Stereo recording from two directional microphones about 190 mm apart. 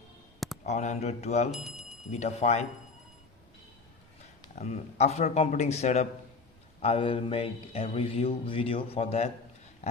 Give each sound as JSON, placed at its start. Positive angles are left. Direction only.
{"t": 0.3, "sound": "a sound", "side_deg": 0}
{"t": 0.6, "sound": "speech", "side_deg": 40}
{"t": 1.5, "sound": "speech", "side_deg": 0}
{"t": 2.0, "sound": "speech", "side_deg": 35}
{"t": 4.5, "sound": "speech", "side_deg": 35}
{"t": 9.8, "sound": "a sound", "side_deg": 35}